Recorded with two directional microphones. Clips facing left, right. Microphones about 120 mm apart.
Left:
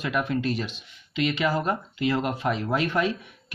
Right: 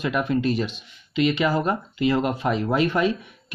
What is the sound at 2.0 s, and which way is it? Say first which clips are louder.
Speech: right 3 dB; 10° right (ahead or behind).